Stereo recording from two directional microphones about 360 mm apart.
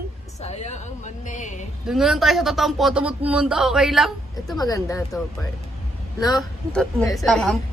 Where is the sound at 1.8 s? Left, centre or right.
Centre.